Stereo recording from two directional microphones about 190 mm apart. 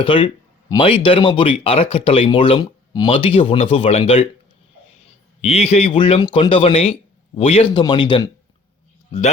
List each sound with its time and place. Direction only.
0.0 s speech: 25° left (ahead or behind)
5.4 s speech: 35° left (ahead or behind)